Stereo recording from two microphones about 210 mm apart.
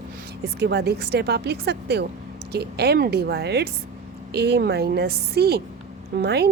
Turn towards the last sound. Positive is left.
turn(degrees=-50)  # may be behind; listen again after turning